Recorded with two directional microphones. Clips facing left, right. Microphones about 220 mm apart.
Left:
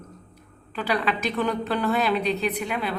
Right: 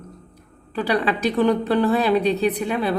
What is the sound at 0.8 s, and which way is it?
A woman's voice, 35° right (ahead or behind).